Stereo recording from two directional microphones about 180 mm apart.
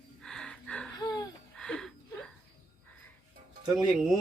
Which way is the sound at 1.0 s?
20° left (ahead or behind).